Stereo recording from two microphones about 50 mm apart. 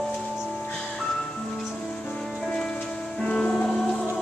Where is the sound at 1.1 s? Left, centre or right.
Centre.